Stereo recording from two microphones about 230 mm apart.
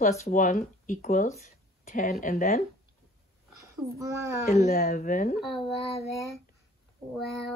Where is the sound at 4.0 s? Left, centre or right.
Centre.